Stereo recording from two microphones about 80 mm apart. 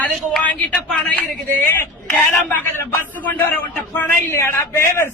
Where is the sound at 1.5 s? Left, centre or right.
Left.